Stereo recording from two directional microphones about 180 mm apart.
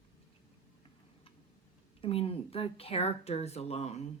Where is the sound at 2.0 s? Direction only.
30° left (ahead or behind).